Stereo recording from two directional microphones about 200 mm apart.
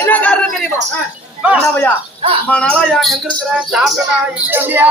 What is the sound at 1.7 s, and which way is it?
A woman's voice, 15° left (ahead or behind).